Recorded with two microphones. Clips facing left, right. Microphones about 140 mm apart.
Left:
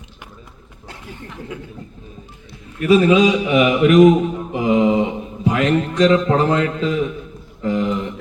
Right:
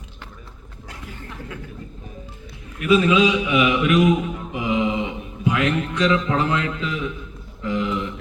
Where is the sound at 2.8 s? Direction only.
40° left (ahead or behind).